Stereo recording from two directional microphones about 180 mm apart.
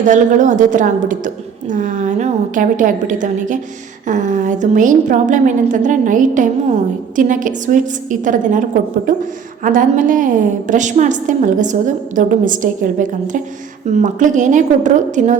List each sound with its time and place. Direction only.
0.1 s a woman's voice: 45° right (ahead or behind)
9.6 s a woman's voice: 50° right (ahead or behind)